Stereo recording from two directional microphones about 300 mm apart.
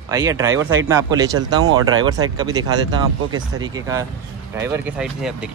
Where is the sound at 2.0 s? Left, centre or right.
Centre.